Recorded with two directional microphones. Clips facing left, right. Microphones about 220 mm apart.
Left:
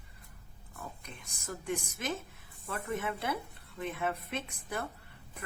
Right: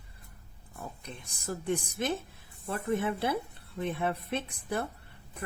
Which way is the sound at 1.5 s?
30° right (ahead or behind).